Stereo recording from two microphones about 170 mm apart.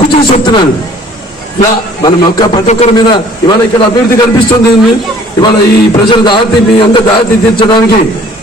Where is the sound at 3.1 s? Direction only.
25° left (ahead or behind).